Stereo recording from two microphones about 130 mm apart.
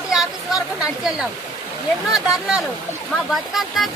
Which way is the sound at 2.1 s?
5° right (ahead or behind).